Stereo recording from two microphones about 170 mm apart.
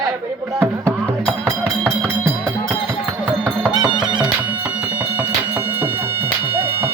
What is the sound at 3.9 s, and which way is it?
Music, 25° right (ahead or behind).